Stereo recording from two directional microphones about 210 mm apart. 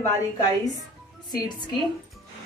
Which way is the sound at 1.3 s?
20° left (ahead or behind).